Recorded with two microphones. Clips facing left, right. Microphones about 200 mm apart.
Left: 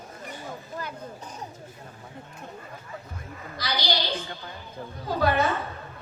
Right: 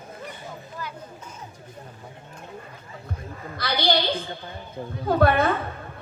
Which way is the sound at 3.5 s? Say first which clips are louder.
Right 5 dB; 55° right (ahead or behind).